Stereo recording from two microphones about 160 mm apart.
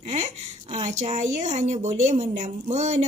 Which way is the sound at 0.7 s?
45° right (ahead or behind).